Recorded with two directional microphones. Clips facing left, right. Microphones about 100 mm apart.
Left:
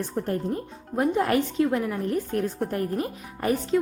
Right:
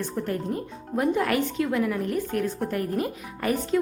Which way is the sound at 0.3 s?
30° left (ahead or behind).